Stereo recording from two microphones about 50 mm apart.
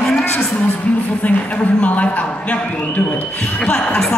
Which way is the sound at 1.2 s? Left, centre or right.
Left.